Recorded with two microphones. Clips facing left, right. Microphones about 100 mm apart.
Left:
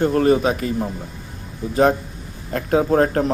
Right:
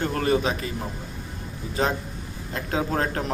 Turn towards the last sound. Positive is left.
turn(degrees=40)  # may be behind; listen again after turning